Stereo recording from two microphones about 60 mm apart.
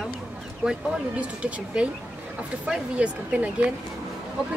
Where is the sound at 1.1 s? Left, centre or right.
Centre.